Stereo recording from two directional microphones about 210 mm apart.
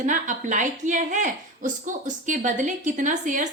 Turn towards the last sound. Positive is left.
turn(degrees=-35)  # may be behind; listen again after turning